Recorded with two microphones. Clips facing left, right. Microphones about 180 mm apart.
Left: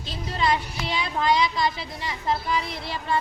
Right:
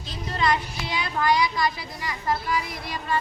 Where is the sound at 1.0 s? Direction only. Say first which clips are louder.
Even; 25° left (ahead or behind).